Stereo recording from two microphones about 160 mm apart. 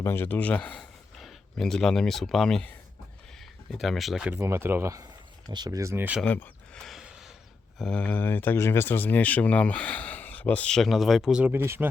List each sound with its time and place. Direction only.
0.0 s speech: 15° left (ahead or behind); by 4.4 s 5° right (ahead or behind)
4.4 s speech: 15° right (ahead or behind)
6.2 s speech: 10° left (ahead or behind)
6.8 s a sound: centre (ahead or behind)
7.8 s speech: 5° left (ahead or behind); by 11.9 s 15° right (ahead or behind)